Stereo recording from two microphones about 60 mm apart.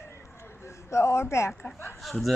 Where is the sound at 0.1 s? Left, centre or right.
Left.